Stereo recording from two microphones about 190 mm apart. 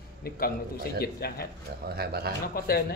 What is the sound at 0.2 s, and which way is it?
A man's voice, 55° left (ahead or behind).